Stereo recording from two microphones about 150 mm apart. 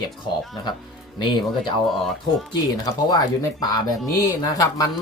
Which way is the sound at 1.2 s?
30° left (ahead or behind).